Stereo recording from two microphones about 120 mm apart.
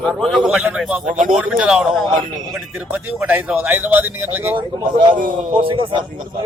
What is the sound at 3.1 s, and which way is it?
Speech, 10° right (ahead or behind).